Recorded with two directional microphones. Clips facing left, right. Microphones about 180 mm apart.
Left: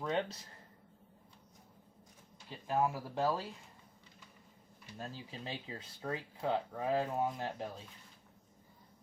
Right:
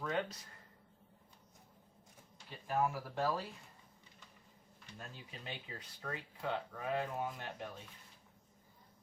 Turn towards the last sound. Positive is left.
turn(degrees=30)  # may be behind; listen again after turning